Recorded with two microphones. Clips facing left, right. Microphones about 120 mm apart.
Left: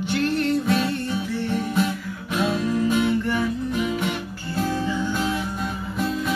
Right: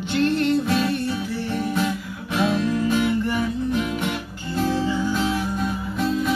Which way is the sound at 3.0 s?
15° right (ahead or behind).